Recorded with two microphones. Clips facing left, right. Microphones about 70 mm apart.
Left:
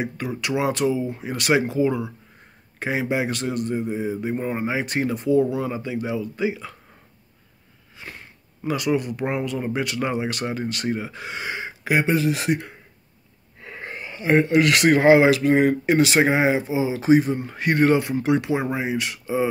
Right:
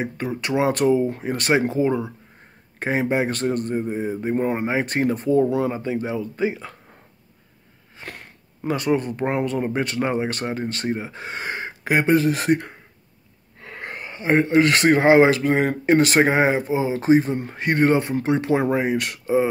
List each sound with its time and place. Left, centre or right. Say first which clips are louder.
0.0 s speech: right 1 dB; right
8.0 s a sound: right 2 dB; right
8.6 s speech: right 1 dB; right
13.7 s wheeze: right 1 dB; right
13.9 s speech: even; right
18.5 s speech: right 4 dB; right